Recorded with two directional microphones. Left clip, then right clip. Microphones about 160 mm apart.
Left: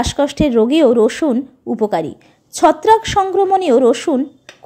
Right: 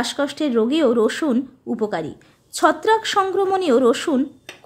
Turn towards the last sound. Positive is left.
turn(degrees=15)  # may be behind; listen again after turning